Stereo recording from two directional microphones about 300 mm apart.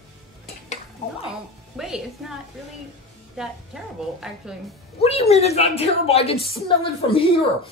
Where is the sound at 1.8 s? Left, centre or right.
Centre.